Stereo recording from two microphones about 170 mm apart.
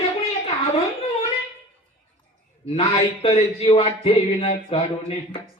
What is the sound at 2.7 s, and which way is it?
A woman's voice, 35° left (ahead or behind).